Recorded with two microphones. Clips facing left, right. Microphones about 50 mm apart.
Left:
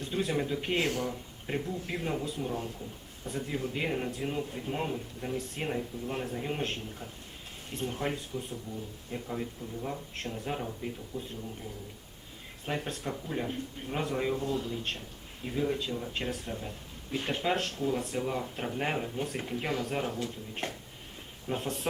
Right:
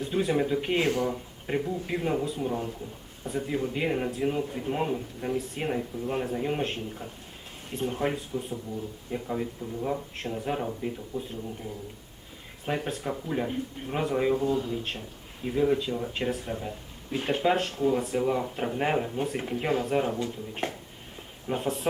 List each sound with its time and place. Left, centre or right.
0.0 s speech: centre
12.6 s speech: centre